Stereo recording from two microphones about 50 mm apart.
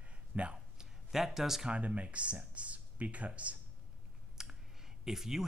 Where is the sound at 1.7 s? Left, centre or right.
Right.